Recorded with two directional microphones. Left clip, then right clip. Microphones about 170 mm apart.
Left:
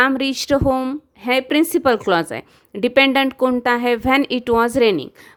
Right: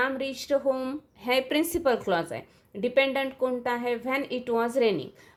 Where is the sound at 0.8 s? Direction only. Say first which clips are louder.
Left 8 dB; 40° left (ahead or behind).